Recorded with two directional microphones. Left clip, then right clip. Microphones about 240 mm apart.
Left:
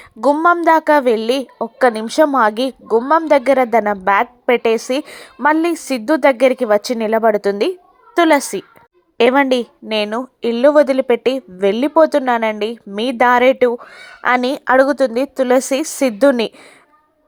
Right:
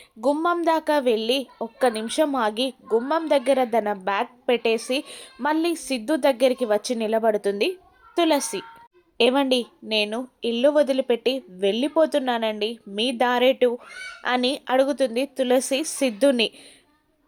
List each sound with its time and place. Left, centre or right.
0.2 s a woman's voice: centre